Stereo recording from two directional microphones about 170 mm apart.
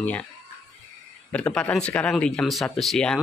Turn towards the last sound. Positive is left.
turn(degrees=5)  # may be behind; listen again after turning